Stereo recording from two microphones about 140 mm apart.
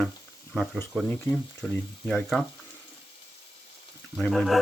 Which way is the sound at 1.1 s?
5° left (ahead or behind).